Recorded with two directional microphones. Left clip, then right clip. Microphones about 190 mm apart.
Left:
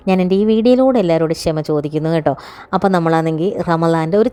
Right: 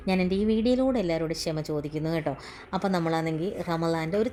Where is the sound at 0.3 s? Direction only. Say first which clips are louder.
Left 12 dB; 70° left (ahead or behind).